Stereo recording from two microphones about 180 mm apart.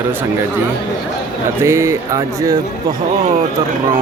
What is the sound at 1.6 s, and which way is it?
Speech, 15° right (ahead or behind).